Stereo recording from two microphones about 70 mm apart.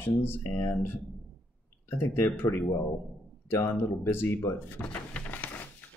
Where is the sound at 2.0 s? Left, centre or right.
Left.